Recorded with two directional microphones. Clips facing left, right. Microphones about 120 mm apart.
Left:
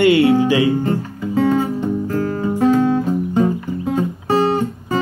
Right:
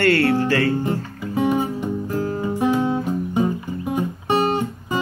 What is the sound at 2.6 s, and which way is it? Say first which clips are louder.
Guitar: left 6 dB; 15° right (ahead or behind).